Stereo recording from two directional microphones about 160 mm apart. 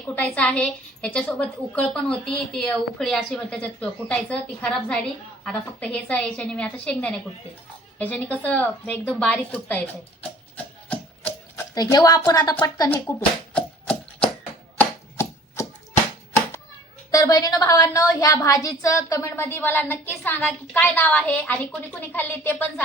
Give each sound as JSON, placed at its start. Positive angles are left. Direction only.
{"t": 0.2, "sound": "a woman's voice", "side_deg": 10}
{"t": 10.8, "sound": "a sound", "side_deg": 10}
{"t": 11.7, "sound": "a woman's voice", "side_deg": 25}
{"t": 12.9, "sound": "hands", "side_deg": 10}
{"t": 14.8, "sound": "chopping", "side_deg": 15}
{"t": 17.1, "sound": "a woman's voice", "side_deg": 20}